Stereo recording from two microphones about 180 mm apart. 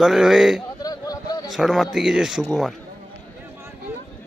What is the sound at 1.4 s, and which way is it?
Speech, centre (ahead or behind).